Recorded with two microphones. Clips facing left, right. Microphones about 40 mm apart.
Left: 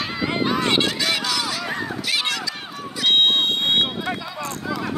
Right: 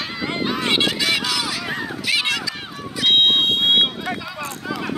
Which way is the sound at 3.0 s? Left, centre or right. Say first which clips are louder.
Right 2 dB; centre.